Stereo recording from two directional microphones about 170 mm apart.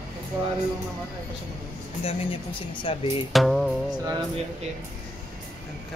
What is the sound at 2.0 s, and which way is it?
A woman's voice, 35° left (ahead or behind).